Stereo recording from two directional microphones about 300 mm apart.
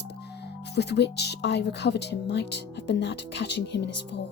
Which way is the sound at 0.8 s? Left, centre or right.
Left.